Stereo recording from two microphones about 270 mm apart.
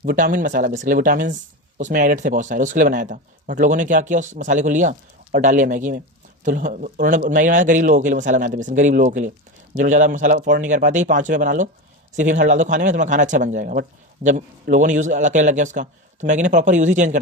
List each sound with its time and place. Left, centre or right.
0.0 s a man's voice: right